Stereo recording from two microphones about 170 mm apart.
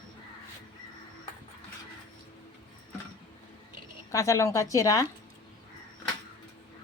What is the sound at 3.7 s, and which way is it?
Speech, 20° left (ahead or behind).